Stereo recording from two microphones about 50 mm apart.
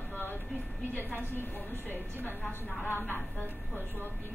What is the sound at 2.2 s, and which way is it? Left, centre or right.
A woman's voice, left.